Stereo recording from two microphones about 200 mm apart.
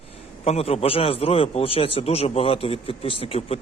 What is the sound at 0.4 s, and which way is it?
Speech, 30° left (ahead or behind).